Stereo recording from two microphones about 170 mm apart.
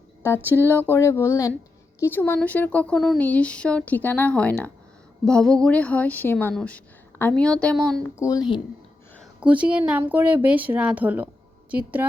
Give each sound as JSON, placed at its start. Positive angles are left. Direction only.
{"t": 0.5, "sound": "speech", "side_deg": 10}
{"t": 8.2, "sound": "speech", "side_deg": 20}
{"t": 9.4, "sound": "speech", "side_deg": -5}